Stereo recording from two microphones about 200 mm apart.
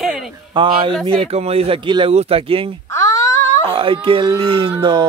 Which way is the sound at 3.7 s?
25° right (ahead or behind).